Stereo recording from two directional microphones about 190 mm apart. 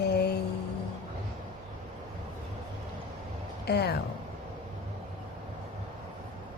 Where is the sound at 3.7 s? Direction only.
60° left (ahead or behind).